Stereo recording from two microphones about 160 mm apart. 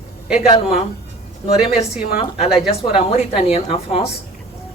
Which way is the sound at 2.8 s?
35° left (ahead or behind).